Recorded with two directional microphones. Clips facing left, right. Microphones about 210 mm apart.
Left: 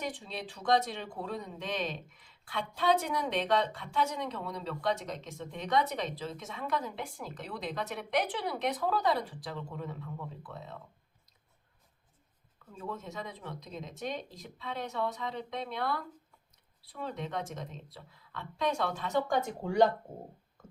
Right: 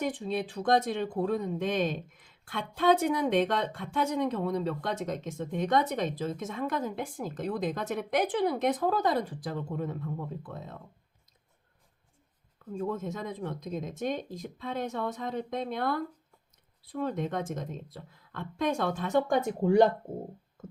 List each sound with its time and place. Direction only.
0.0 s speech: 50° right (ahead or behind)
12.7 s speech: 50° right (ahead or behind)